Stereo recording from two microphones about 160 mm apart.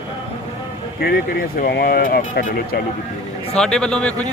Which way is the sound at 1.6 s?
70° left (ahead or behind).